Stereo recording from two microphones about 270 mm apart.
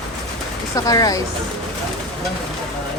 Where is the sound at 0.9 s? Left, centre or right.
Centre.